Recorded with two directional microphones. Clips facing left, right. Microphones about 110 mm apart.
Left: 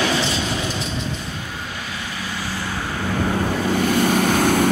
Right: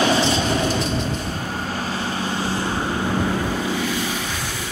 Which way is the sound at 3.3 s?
50° left (ahead or behind).